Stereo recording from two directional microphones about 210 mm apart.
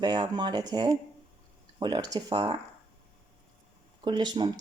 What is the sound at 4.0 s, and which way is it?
Speech, 20° right (ahead or behind).